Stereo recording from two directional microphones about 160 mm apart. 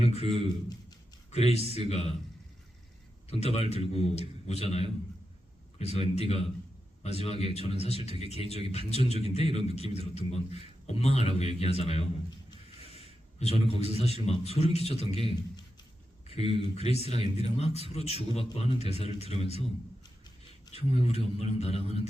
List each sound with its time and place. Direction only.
0.0 s a man's voice: 40° left (ahead or behind)
3.2 s a man's voice: 40° left (ahead or behind)
20.7 s a man's voice: 40° left (ahead or behind)